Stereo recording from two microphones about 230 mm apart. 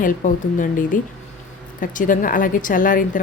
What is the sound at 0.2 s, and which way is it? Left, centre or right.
A woman's voice, left.